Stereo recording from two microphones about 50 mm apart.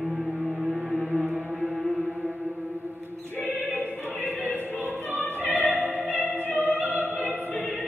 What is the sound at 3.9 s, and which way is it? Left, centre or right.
Opera, left.